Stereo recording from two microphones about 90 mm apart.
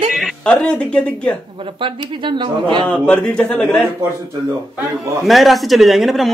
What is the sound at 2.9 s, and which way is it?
Speech, 15° left (ahead or behind).